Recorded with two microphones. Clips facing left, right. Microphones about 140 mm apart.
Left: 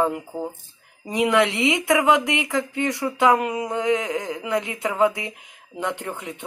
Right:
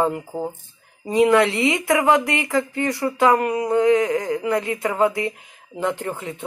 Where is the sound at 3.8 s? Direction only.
20° left (ahead or behind).